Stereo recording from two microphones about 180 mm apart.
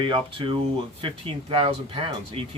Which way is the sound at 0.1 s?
30° right (ahead or behind).